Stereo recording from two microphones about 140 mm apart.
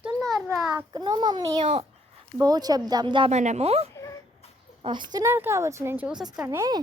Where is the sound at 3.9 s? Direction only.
20° left (ahead or behind).